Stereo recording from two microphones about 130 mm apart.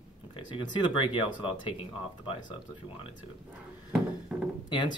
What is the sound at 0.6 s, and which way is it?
Speech, 40° left (ahead or behind).